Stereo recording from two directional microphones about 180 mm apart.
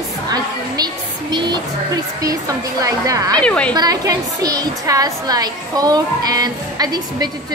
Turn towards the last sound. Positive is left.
turn(degrees=-20)  # may be behind; listen again after turning